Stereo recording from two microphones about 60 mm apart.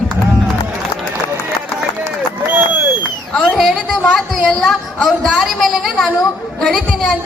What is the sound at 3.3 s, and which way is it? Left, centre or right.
Speech, centre.